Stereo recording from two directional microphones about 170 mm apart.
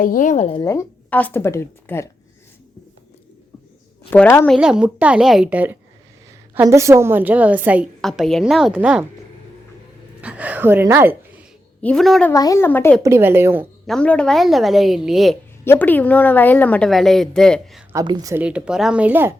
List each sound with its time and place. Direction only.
0.0 s a woman's voice: 50° left (ahead or behind)
0.6 s a woman's voice: 15° left (ahead or behind)
4.1 s a woman's voice: 15° left (ahead or behind)
4.4 s a woman's voice: 5° right (ahead or behind)
10.2 s speech: 10° right (ahead or behind)
11.8 s a woman's voice: 5° left (ahead or behind)
12.3 s a woman's voice: 20° left (ahead or behind)
13.0 s a woman's voice: 15° right (ahead or behind)
13.8 s a woman's voice: 5° left (ahead or behind)
15.6 s a woman's voice: 10° left (ahead or behind)
17.9 s a woman's voice: 25° right (ahead or behind)
18.4 s a woman's voice: 5° right (ahead or behind)